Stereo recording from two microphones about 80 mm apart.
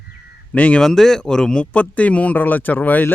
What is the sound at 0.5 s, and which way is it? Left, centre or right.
Speech, centre.